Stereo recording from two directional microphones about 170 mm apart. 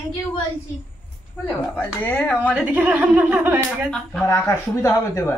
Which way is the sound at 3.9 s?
10° left (ahead or behind).